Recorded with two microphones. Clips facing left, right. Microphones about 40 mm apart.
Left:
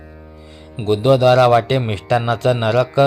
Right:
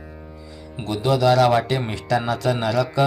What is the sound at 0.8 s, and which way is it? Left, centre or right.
Speech, left.